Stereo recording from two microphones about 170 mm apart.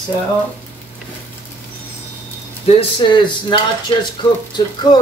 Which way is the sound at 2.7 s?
30° left (ahead or behind).